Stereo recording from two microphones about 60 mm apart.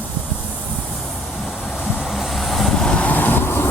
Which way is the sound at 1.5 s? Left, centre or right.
Centre.